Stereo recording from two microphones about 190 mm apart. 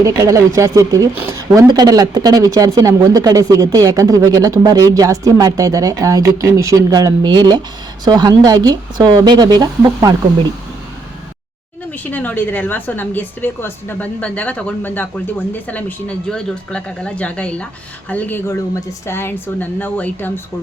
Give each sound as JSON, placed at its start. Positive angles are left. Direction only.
{"t": 0.0, "sound": "speech", "side_deg": -15}
{"t": 12.1, "sound": "a woman's voice", "side_deg": 10}